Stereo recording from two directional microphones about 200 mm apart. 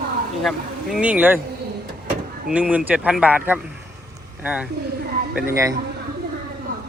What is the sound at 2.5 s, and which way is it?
A man's voice, 5° right (ahead or behind).